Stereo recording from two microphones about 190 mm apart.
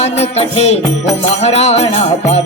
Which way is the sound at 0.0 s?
35° left (ahead or behind).